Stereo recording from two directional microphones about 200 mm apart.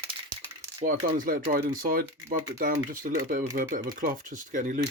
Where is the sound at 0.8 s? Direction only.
40° right (ahead or behind).